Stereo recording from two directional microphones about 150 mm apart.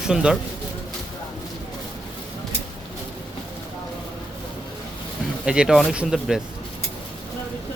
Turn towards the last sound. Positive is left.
turn(degrees=0)  # may be behind; listen again after turning